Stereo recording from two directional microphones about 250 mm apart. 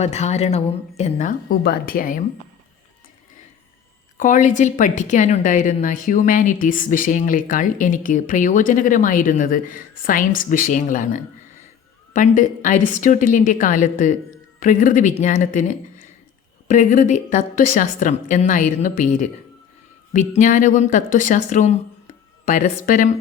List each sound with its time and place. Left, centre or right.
0.0 s a woman's voice: left
4.2 s a woman's voice: left